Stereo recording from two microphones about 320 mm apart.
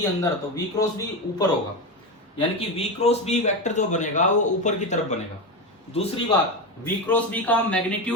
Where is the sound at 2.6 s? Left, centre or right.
Centre.